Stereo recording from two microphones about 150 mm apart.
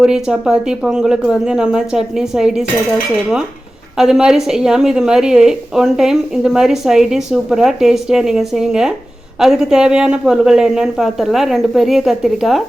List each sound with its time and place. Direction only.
0.0 s a woman's voice: 5° right (ahead or behind)
3.9 s a woman's voice: 5° right (ahead or behind)